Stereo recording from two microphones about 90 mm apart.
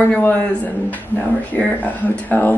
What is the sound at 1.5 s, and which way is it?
Speech, 10° left (ahead or behind).